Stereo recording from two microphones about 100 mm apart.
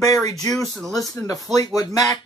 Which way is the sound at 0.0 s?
35° left (ahead or behind).